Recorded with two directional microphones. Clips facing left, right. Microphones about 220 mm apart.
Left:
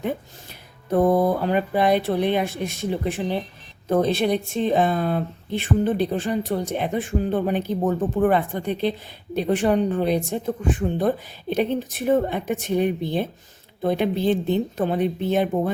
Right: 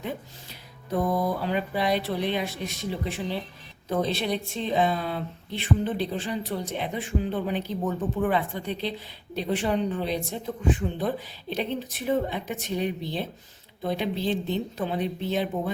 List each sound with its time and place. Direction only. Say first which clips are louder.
0.9 s speech: left 7 dB; 55° left (ahead or behind)